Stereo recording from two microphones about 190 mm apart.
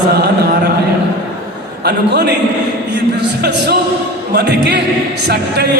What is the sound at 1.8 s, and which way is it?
Speech, 60° right (ahead or behind).